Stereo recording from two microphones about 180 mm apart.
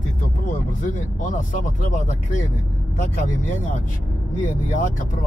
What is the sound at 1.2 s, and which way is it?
Speech, 45° left (ahead or behind).